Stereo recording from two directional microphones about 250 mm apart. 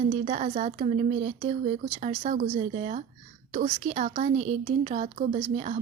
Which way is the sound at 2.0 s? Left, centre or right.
Right.